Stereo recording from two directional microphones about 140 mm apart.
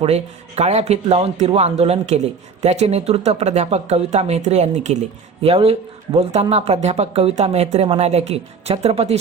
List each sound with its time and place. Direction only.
0.0 s speech: 50° right (ahead or behind)